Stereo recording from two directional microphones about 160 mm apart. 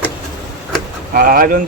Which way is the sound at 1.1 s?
60° right (ahead or behind).